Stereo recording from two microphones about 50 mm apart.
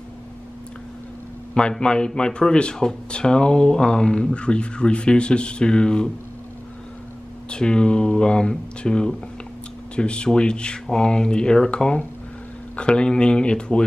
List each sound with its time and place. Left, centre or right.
1.5 s a man's voice: centre
7.4 s a man's voice: centre